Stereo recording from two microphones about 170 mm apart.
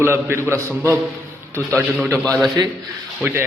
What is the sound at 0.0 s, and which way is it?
Speech, 15° right (ahead or behind).